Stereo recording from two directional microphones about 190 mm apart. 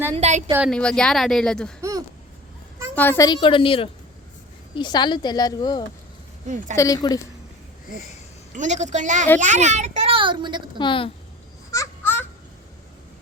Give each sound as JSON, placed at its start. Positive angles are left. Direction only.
{"t": 0.2, "sound": "a woman's voice", "side_deg": -40}
{"t": 0.7, "sound": "a woman's voice", "side_deg": 5}
{"t": 1.8, "sound": "a sound", "side_deg": -20}
{"t": 2.9, "sound": "a woman's voice", "side_deg": 10}
{"t": 3.2, "sound": "speech", "side_deg": 25}
{"t": 8.5, "sound": "a woman's voice", "side_deg": -40}
{"t": 10.8, "sound": "speech", "side_deg": 25}
{"t": 11.7, "sound": "a sound", "side_deg": 15}